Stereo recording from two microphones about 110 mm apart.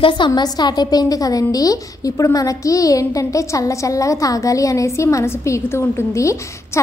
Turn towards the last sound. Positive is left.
turn(degrees=25)  # may be behind; listen again after turning